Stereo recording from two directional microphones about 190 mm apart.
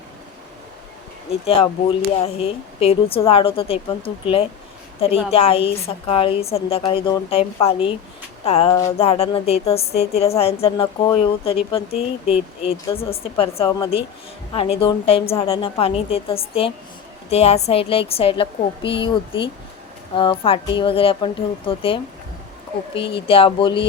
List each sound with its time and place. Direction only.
1.3 s speech: 30° left (ahead or behind)
5.3 s a woman's voice: 30° left (ahead or behind)
13.7 s speech: 20° left (ahead or behind)
14.5 s speech: 30° left (ahead or behind)
23.1 s speech: 30° left (ahead or behind)